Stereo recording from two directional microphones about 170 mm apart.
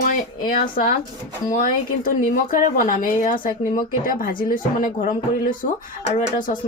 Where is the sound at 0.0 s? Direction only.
55° left (ahead or behind).